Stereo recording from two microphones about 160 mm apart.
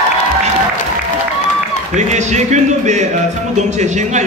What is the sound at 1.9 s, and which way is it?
A man's voice, 45° right (ahead or behind).